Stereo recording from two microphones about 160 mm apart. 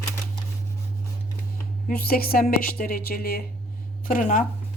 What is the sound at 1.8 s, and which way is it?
Speech, 65° left (ahead or behind).